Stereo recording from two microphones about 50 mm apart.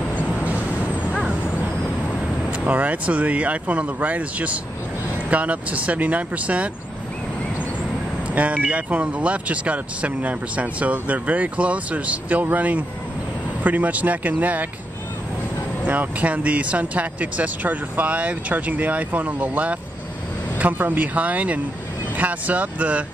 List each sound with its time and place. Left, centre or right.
0.1 s vehicle: left
2.5 s speech: right
8.4 s speech: right
15.9 s speech: right